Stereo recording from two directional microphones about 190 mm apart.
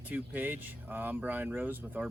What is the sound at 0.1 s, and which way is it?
Speech, 10° right (ahead or behind).